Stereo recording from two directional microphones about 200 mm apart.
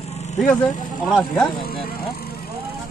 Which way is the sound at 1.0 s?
Centre (ahead or behind).